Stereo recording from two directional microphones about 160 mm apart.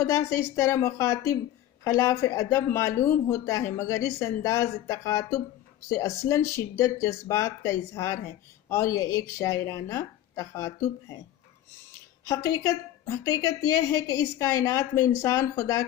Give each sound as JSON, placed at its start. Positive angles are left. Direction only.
{"t": 0.0, "sound": "a woman's voice", "side_deg": 20}
{"t": 12.4, "sound": "a woman's voice", "side_deg": 20}